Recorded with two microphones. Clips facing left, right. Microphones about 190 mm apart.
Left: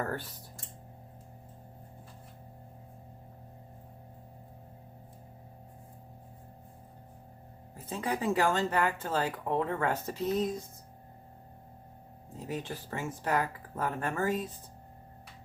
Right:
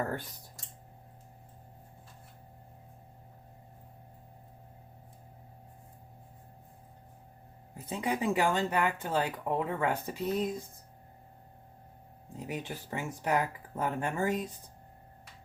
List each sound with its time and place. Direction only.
7.9 s speech: 15° right (ahead or behind)
12.5 s speech: 15° right (ahead or behind)